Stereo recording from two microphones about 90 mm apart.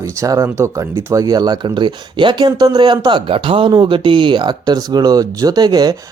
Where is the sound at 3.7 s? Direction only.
65° right (ahead or behind); by 5.9 s 45° right (ahead or behind).